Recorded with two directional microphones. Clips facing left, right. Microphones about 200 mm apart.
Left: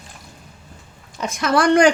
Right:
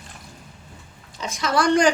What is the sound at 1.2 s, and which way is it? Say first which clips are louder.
Speech: left 4 dB; 60° left (ahead or behind).